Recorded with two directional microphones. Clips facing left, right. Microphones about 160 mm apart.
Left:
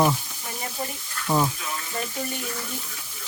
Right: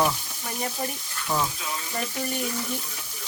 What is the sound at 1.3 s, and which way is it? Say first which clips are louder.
Speech: left 4 dB; 20° left (ahead or behind).